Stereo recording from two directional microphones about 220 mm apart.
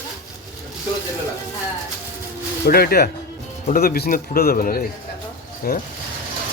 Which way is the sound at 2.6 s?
45° left (ahead or behind).